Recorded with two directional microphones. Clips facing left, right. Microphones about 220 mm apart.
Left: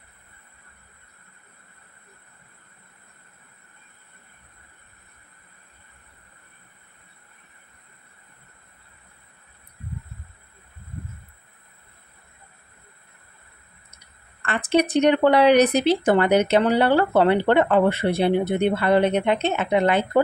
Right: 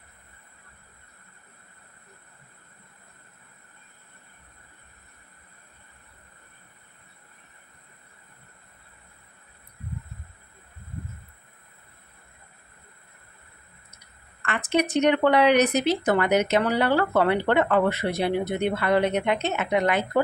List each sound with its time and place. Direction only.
14.4 s speech: 35° left (ahead or behind)